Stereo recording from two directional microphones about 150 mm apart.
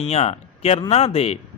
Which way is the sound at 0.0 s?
45° left (ahead or behind).